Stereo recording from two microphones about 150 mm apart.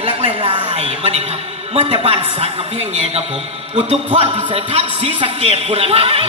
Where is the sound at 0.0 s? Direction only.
35° right (ahead or behind).